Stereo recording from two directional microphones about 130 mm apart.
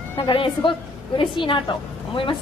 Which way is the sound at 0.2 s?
40° left (ahead or behind).